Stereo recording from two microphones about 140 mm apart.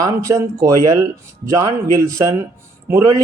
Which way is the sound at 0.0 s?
25° right (ahead or behind).